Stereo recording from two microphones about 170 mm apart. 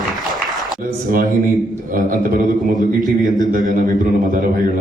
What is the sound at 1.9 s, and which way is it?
Speech, 55° right (ahead or behind).